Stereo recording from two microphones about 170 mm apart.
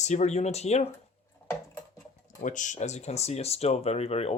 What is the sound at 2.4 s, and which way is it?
Speech, 50° left (ahead or behind).